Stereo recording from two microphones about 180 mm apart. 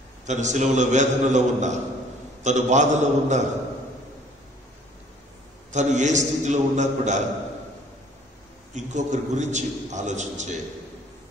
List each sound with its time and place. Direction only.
0.3 s a man's voice: 40° right (ahead or behind)
5.7 s a man's voice: 40° right (ahead or behind)
8.7 s a man's voice: 40° right (ahead or behind)